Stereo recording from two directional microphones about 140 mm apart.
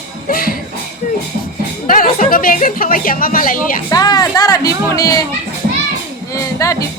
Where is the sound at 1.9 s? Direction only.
85° left.